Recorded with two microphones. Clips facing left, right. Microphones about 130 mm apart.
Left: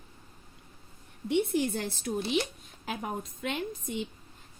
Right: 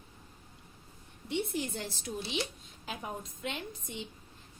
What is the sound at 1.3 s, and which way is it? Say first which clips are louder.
A woman's voice: left 7 dB; 55° left (ahead or behind).